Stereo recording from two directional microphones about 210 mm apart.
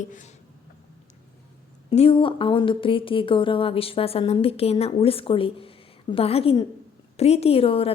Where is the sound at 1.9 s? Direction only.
25° left (ahead or behind).